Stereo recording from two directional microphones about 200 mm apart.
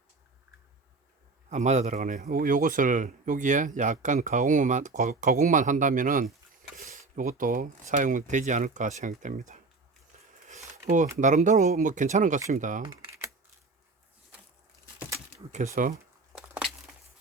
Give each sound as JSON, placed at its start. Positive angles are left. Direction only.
{"t": 1.5, "sound": "speech", "side_deg": -35}
{"t": 11.2, "sound": "speech", "side_deg": -40}
{"t": 12.8, "sound": "typing", "side_deg": -15}
{"t": 15.5, "sound": "speech", "side_deg": -40}